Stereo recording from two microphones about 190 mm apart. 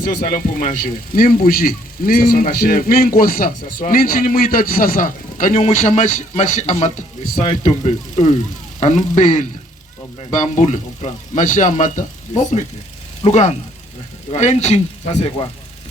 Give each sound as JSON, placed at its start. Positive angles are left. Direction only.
{"t": 0.0, "sound": "speech", "side_deg": 40}